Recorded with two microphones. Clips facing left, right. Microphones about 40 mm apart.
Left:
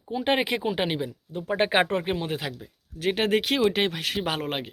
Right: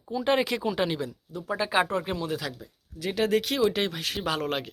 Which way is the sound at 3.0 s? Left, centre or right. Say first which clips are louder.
Left 2 dB; left.